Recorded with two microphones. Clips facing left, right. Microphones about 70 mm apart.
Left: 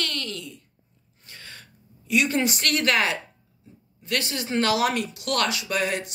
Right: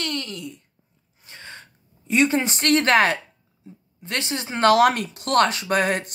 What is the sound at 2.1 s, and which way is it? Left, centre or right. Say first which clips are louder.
Speech: right 3 dB; right.